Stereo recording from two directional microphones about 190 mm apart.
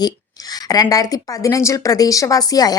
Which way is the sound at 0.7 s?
20° left (ahead or behind).